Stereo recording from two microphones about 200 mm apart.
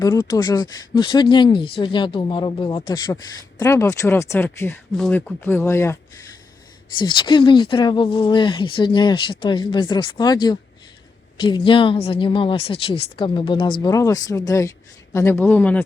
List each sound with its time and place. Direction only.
0.0 s speech: 20° left (ahead or behind)
7.0 s speech: 25° left (ahead or behind); by 15.8 s 10° left (ahead or behind)